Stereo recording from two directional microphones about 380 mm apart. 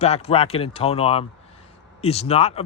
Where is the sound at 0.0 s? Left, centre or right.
Centre.